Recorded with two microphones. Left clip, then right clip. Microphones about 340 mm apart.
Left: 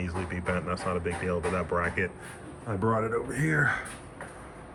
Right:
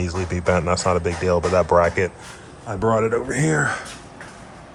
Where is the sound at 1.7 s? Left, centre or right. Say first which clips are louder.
Right 14 dB; right.